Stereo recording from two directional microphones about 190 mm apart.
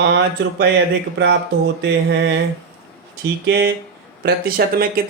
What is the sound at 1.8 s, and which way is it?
Speech, 65° right (ahead or behind).